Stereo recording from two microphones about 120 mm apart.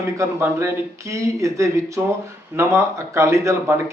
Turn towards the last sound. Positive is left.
turn(degrees=-25)  # may be behind; listen again after turning